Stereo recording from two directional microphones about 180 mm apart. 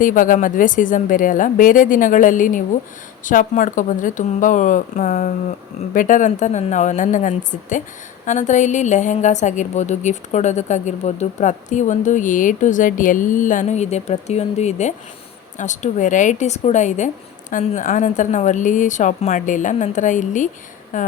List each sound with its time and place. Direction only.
0.0 s a woman's voice: 50° left (ahead or behind)